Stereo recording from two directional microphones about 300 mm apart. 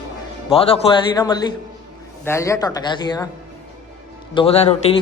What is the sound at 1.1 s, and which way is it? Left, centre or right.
Speech, centre.